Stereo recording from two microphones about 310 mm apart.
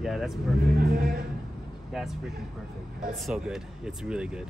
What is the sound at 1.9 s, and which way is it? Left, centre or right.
Speech, centre.